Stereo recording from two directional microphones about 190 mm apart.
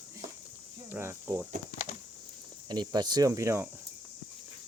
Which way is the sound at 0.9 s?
10° right (ahead or behind).